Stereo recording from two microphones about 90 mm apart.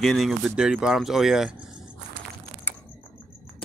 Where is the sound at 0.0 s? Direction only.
Centre (ahead or behind).